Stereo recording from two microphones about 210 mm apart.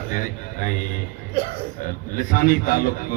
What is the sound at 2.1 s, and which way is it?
Speech, 40° left (ahead or behind).